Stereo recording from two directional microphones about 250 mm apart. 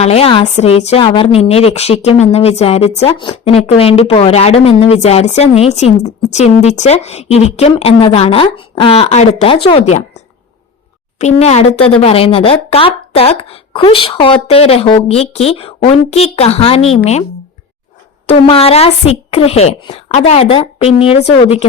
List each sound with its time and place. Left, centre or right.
0.0 s speech: left
11.2 s speech: left
18.3 s speech: left